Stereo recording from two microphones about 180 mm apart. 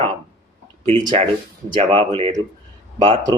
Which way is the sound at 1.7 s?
30° right (ahead or behind).